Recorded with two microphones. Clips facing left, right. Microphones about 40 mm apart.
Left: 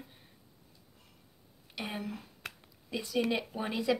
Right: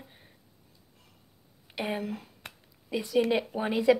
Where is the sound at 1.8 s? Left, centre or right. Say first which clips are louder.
Right 6 dB; centre.